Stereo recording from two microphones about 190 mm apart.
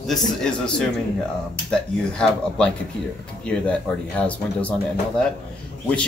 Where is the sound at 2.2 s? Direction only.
5° left (ahead or behind).